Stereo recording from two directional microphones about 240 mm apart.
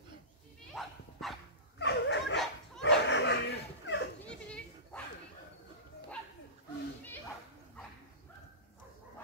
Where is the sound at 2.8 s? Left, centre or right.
Left.